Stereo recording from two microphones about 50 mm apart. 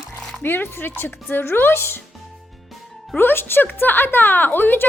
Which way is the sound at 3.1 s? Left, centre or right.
Left.